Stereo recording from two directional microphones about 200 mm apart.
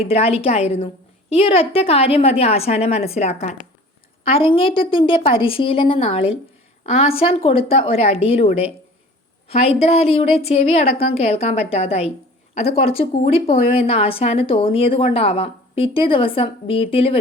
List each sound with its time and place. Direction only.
0.0 s a woman's voice: 30° left (ahead or behind)